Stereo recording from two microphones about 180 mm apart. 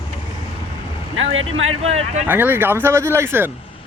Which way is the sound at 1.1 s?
90° right.